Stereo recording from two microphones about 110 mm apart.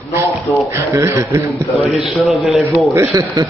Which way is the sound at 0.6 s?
25° right (ahead or behind).